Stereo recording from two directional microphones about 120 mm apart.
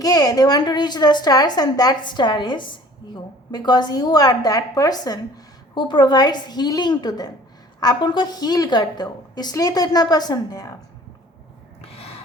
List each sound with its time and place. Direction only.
0.0 s a woman's voice: 30° left (ahead or behind)
11.8 s gasp: 55° left (ahead or behind)